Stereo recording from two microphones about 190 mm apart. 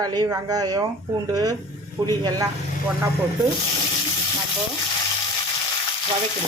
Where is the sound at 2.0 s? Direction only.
20° right (ahead or behind).